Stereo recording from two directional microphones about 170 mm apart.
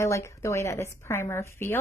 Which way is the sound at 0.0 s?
15° left (ahead or behind).